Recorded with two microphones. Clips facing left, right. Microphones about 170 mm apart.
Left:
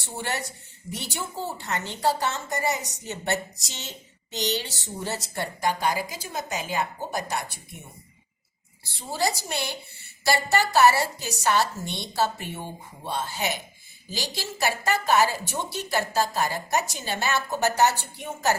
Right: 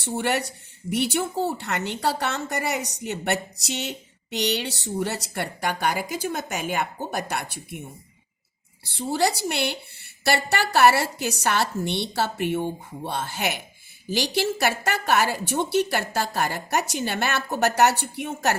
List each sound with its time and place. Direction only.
0.2 s a woman's voice: 65° right (ahead or behind)
9.0 s a woman's voice: 65° right (ahead or behind)
17.0 s a woman's voice: 60° right (ahead or behind)